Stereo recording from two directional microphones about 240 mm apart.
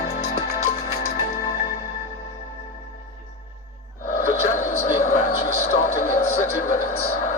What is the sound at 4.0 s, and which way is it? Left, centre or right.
Music, left.